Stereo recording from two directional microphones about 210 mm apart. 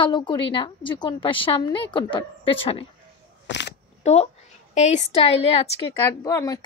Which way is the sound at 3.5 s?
55° left (ahead or behind).